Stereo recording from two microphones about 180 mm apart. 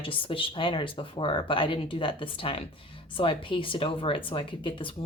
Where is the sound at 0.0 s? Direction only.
30° left (ahead or behind).